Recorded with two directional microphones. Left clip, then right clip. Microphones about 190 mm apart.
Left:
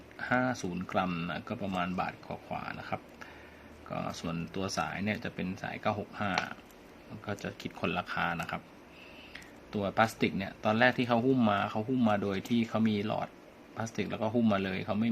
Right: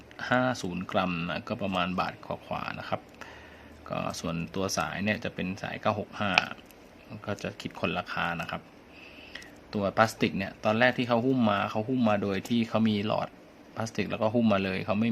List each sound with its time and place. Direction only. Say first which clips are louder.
0.2 s speech: right 4 dB; 15° right (ahead or behind)